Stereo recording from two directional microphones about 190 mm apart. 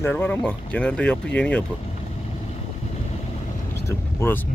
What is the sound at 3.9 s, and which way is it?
Vehicle, 15° left (ahead or behind).